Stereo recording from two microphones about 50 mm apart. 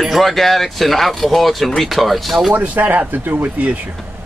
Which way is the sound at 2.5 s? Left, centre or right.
Right.